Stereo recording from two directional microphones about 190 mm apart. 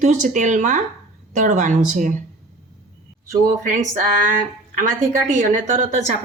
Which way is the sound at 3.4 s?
40° right (ahead or behind).